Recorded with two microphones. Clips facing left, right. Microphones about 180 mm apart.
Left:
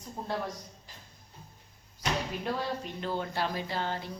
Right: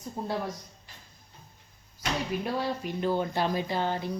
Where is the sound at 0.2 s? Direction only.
10° right (ahead or behind).